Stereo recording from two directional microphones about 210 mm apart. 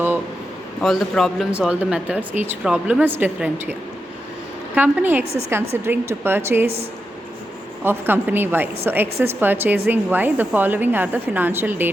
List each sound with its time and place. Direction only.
0.8 s a man's voice: centre (ahead or behind)
7.9 s speech: 10° right (ahead or behind)